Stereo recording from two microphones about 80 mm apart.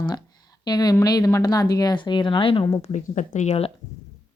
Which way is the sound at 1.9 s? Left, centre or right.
Left.